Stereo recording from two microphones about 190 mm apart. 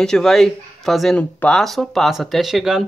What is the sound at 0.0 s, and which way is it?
Speech, centre (ahead or behind).